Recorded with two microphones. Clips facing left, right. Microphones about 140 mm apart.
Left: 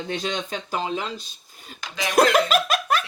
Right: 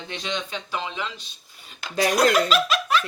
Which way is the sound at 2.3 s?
50° left (ahead or behind).